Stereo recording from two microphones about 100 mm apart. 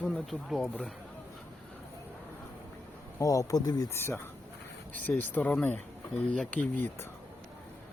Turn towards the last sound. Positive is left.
turn(degrees=15)  # may be behind; listen again after turning